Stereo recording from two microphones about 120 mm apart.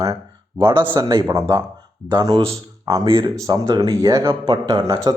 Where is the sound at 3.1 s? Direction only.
45° right (ahead or behind).